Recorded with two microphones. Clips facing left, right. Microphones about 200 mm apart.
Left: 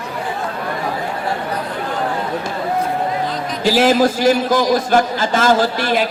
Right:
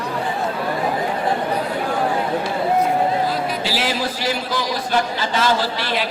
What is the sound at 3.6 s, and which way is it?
A man's voice, 45° left (ahead or behind).